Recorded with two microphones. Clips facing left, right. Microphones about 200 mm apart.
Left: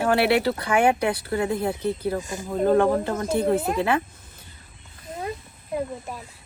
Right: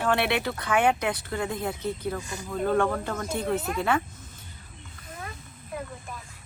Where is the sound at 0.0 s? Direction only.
40° left (ahead or behind).